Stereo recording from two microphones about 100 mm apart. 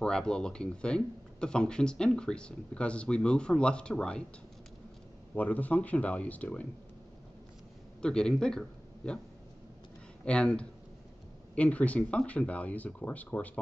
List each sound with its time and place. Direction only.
0.0 s speech: 10° left (ahead or behind)
5.3 s speech: 15° left (ahead or behind)
8.0 s a man's voice: 10° left (ahead or behind)
10.2 s speech: 10° left (ahead or behind)